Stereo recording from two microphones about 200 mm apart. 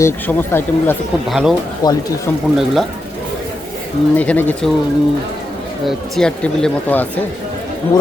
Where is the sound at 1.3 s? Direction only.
Centre (ahead or behind).